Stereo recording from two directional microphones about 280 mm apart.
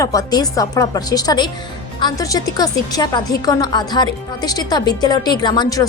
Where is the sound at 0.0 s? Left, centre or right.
Centre.